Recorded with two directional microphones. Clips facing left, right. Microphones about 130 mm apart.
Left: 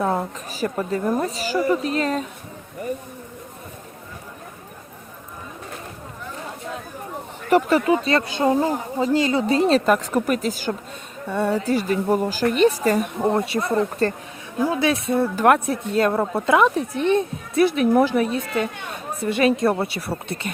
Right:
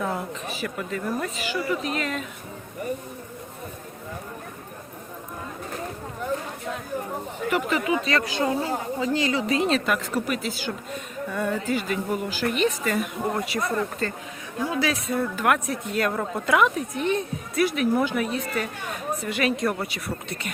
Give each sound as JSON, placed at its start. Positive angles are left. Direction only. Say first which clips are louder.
{"t": 0.0, "sound": "a woman's voice", "louder": "left 5 dB", "side_deg": 40}
{"t": 7.5, "sound": "a woman's voice", "louder": "left 8 dB", "side_deg": 40}
{"t": 11.3, "sound": "a woman's voice", "louder": "left 5 dB", "side_deg": 30}